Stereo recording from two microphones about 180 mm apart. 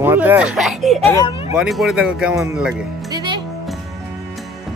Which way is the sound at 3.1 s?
25° right (ahead or behind).